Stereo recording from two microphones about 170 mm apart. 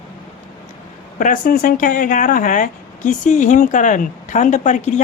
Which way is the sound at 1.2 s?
50° left (ahead or behind).